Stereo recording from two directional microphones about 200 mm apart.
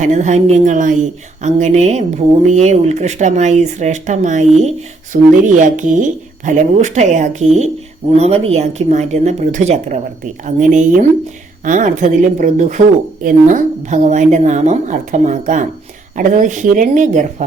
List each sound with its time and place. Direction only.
0.0 s speech: 35° right (ahead or behind)